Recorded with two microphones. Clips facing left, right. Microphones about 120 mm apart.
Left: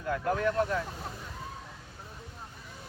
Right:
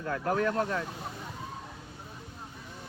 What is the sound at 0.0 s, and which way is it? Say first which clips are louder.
Speech: even; 40° right (ahead or behind).